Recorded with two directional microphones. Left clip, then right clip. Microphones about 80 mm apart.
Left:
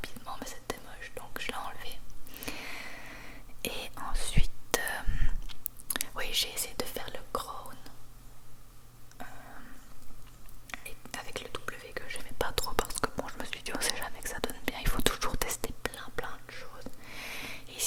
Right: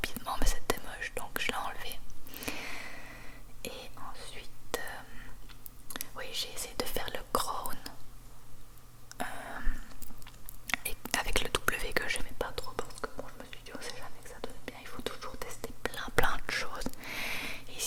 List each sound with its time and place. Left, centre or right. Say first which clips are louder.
0.0 s whispering: right 6 dB; right; by 6.7 s left
6.7 s whispering: right 1 dB; centre
6.9 s whispering: right 3 dB; centre; by 7.9 s right
9.1 s a sound: right 8 dB; right
10.7 s whispering: right 9 dB; right
12.5 s whispering: left 7 dB; left
16.1 s whispering: right 10 dB; right
17.0 s a sound: right 4 dB; right
17.4 s wheeze: right 2 dB; centre